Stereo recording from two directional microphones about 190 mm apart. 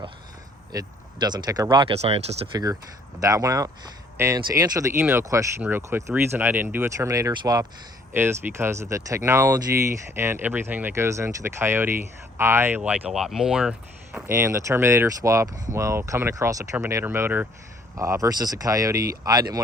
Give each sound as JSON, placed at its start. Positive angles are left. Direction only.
{"t": 0.7, "sound": "speech", "side_deg": -20}
{"t": 2.5, "sound": "speech", "side_deg": -20}
{"t": 14.3, "sound": "speech", "side_deg": -15}